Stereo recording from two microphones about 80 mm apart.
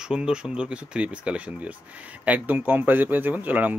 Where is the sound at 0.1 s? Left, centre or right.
Centre.